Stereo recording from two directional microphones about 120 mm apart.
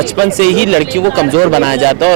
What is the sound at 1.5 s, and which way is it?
Speech, 15° right (ahead or behind).